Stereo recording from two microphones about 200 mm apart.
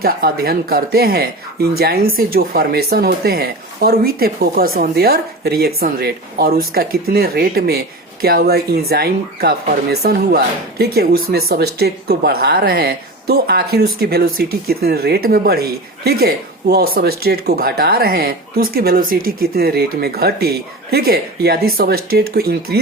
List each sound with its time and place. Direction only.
0.0 s speech: 50° right (ahead or behind)